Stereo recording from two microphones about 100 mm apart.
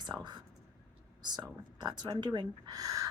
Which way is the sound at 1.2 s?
45° right (ahead or behind).